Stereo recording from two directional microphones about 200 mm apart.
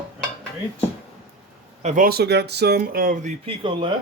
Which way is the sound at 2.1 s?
55° right (ahead or behind).